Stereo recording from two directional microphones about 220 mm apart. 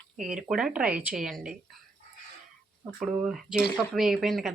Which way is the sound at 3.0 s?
Centre (ahead or behind).